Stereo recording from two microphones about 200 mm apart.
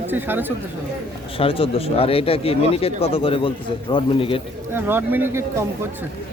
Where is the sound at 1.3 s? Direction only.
25° left (ahead or behind).